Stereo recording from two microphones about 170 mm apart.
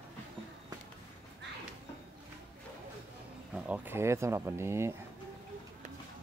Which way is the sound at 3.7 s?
10° right (ahead or behind).